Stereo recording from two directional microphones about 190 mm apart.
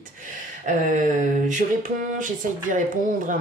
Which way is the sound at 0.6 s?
40° right (ahead or behind).